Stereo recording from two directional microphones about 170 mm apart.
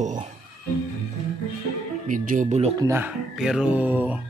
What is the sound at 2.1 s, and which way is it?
Speech, 50° right (ahead or behind).